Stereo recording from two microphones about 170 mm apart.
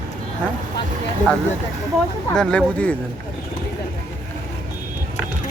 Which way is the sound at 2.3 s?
5° left (ahead or behind).